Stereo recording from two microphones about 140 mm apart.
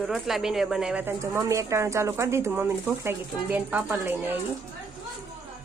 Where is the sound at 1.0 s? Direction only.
20° right (ahead or behind).